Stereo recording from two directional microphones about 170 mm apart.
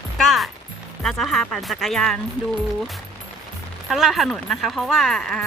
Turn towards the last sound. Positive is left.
turn(degrees=0)  # may be behind; listen again after turning